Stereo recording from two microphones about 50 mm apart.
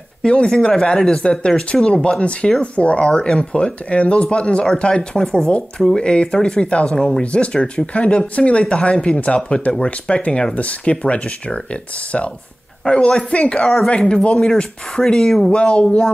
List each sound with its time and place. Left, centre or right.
0.2 s speech: centre
12.8 s speech: centre